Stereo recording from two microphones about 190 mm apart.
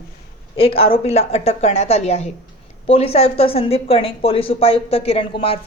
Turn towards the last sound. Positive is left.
turn(degrees=30)  # may be behind; listen again after turning